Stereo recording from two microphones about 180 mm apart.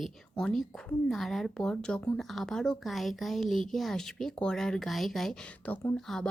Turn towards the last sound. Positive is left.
turn(degrees=5)  # may be behind; listen again after turning